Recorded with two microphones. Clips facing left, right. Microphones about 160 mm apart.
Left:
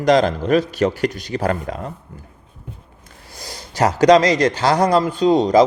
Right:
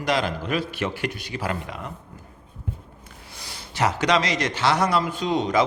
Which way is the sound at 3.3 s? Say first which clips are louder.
Left 7 dB; 40° left (ahead or behind).